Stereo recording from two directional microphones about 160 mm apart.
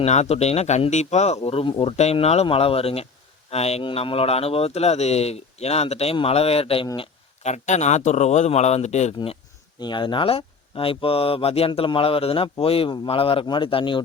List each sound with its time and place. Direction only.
0.0 s a man's voice: 45° left (ahead or behind)